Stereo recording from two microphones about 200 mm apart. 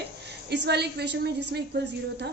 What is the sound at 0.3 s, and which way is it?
Speech, 55° right (ahead or behind).